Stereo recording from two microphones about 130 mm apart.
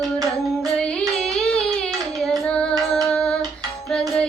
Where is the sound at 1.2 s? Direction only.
10° left (ahead or behind).